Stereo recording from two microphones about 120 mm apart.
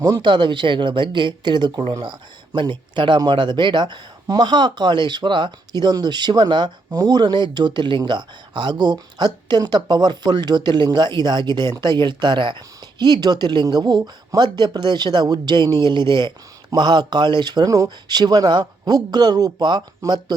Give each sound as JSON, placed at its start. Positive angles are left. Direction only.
{"t": 0.0, "sound": "speech", "side_deg": -35}